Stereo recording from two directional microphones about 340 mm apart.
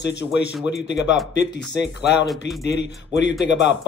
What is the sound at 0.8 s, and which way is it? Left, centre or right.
Speech, left.